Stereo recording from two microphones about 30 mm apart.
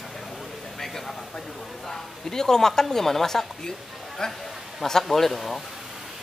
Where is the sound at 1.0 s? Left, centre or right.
Centre.